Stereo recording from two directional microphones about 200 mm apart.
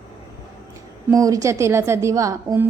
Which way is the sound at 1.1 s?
15° right (ahead or behind).